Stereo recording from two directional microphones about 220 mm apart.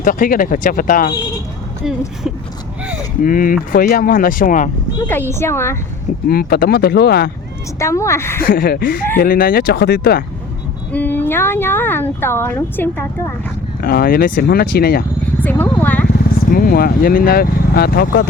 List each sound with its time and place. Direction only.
0.0 s speech: 40° left (ahead or behind)
3.2 s speech: 40° left (ahead or behind)
5.0 s speech: 10° left (ahead or behind)
6.2 s speech: 45° left (ahead or behind)
7.8 s speech: 15° left (ahead or behind)
8.4 s speech: 40° left (ahead or behind)
10.9 s speech: 10° left (ahead or behind)
13.8 s speech: 40° left (ahead or behind)
15.4 s a sound: 10° left (ahead or behind)
16.5 s speech: 40° left (ahead or behind)